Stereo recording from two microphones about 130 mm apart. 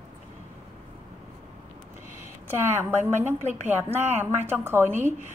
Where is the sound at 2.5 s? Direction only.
20° right (ahead or behind).